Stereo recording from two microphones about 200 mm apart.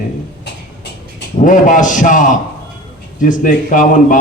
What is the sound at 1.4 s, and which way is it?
A man's voice, 40° left (ahead or behind).